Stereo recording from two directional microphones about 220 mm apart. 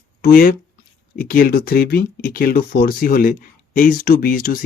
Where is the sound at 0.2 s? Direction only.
45° left (ahead or behind).